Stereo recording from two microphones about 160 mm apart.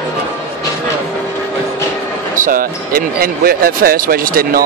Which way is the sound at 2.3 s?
60° right (ahead or behind).